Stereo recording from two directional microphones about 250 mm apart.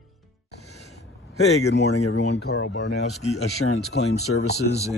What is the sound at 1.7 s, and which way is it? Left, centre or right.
Speech, left.